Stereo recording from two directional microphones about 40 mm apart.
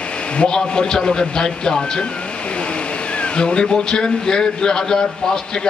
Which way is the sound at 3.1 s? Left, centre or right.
Left.